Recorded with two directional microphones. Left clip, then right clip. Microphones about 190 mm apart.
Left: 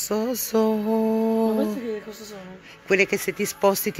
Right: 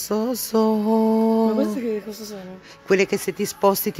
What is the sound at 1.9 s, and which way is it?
Speech, 65° right (ahead or behind).